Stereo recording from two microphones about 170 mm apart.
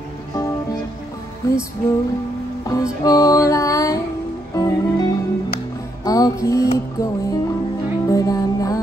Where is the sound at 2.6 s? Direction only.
20° left (ahead or behind).